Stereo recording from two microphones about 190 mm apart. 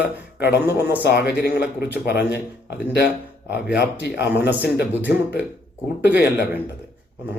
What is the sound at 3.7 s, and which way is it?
Speech, 60° left (ahead or behind).